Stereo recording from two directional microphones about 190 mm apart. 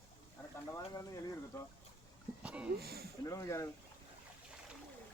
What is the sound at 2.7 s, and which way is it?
Speech, 55° right (ahead or behind).